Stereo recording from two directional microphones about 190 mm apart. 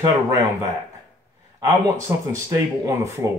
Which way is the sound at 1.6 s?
15° right (ahead or behind).